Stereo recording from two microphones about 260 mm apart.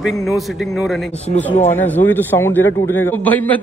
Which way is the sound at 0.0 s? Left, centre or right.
Centre.